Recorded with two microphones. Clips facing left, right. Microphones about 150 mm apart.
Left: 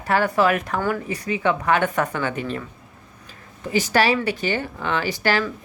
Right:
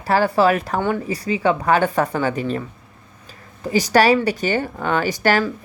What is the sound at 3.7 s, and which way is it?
Speech, 40° right (ahead or behind).